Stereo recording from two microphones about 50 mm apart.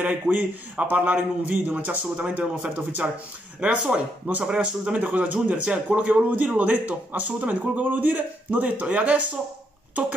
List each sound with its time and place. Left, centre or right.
0.0 s a man's voice: right
4.9 s a man's voice: right